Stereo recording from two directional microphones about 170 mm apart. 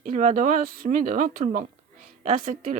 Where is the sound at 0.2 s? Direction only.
50° right (ahead or behind).